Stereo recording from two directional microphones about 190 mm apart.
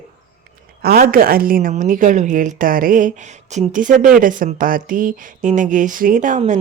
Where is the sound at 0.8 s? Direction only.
55° right (ahead or behind).